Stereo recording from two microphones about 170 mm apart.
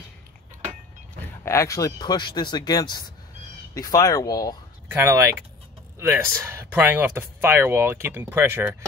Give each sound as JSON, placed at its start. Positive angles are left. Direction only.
{"t": 1.4, "sound": "speech", "side_deg": 15}
{"t": 4.8, "sound": "speech", "side_deg": -15}